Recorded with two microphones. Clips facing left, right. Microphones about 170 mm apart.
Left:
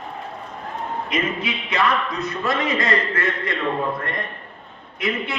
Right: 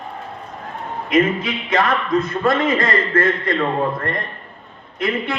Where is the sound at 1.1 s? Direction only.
50° right (ahead or behind).